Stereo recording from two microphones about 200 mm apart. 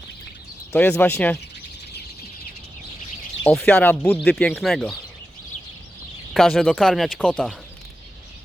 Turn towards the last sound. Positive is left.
turn(degrees=5)  # may be behind; listen again after turning